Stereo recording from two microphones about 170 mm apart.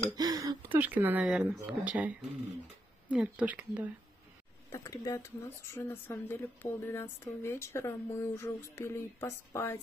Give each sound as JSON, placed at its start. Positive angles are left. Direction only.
{"t": 0.1, "sound": "a sound", "side_deg": -20}
{"t": 0.7, "sound": "speech", "side_deg": -10}
{"t": 4.6, "sound": "speech", "side_deg": 20}